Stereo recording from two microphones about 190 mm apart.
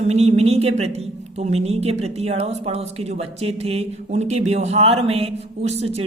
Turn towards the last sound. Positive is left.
turn(degrees=-30)  # may be behind; listen again after turning